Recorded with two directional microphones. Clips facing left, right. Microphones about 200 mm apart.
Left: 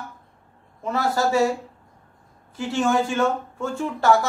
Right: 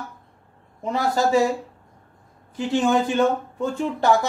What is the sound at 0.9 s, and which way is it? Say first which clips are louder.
Speech: right 2 dB; 15° right (ahead or behind).